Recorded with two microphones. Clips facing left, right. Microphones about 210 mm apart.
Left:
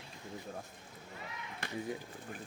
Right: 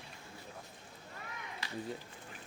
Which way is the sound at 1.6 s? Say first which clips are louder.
Left 4 dB; 50° left (ahead or behind).